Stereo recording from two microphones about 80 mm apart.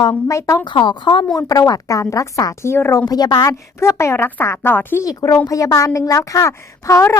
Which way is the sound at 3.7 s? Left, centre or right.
Left.